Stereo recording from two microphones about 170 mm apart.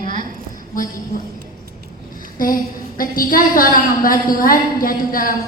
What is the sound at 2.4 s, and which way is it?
A woman's voice, 55° left (ahead or behind).